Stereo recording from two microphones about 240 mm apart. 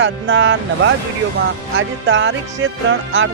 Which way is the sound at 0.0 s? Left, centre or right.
Right.